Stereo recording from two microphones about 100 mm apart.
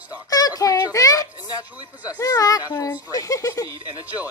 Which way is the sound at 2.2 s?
35° left (ahead or behind).